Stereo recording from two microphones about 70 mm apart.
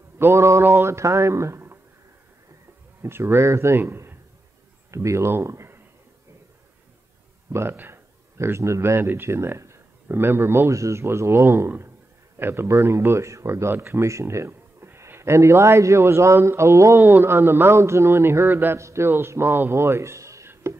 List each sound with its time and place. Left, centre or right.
0.2 s speech: right
3.0 s speech: right
3.8 s a man's voice: right
4.9 s speech: right
7.5 s speech: right
8.4 s speech: right
10.7 s speech: right
18.8 s a man's voice: right